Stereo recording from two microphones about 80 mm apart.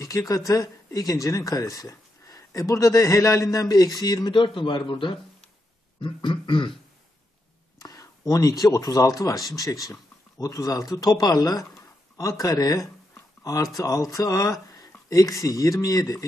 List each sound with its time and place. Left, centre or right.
0.5 s speech: left
4.3 s a man's voice: left
5.9 s beatboxing: left
6.4 s a man's voice: left
7.8 s speech: left
13.4 s a sound: left
13.7 s speech: left